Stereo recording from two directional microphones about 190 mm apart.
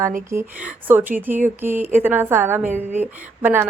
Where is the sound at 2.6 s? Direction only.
40° right (ahead or behind).